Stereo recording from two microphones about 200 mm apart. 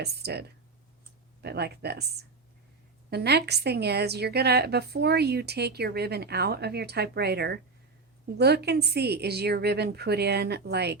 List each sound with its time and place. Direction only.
0.0 s a woman's voice: 55° right (ahead or behind)